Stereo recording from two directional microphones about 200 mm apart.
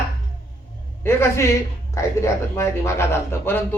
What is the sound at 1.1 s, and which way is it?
A woman's voice, 10° left (ahead or behind).